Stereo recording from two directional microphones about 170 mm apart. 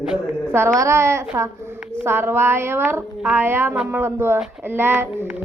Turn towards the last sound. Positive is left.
turn(degrees=-10)  # may be behind; listen again after turning